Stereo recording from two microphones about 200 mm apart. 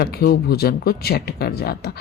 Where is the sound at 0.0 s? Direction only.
50° left (ahead or behind).